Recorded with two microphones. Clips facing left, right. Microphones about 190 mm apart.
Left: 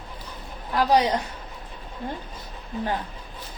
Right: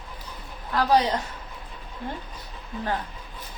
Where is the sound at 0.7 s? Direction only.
15° left (ahead or behind).